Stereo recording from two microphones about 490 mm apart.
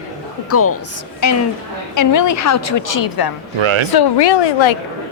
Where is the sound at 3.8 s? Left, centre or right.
Left.